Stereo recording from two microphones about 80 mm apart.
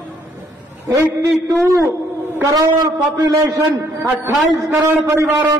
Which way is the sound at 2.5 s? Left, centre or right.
Right.